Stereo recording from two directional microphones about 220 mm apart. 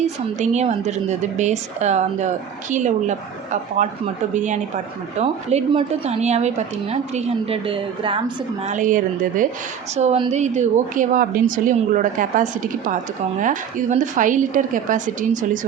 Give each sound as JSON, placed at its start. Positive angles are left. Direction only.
{"t": 0.0, "sound": "a woman's voice", "side_deg": -30}
{"t": 8.6, "sound": "a woman's voice", "side_deg": -35}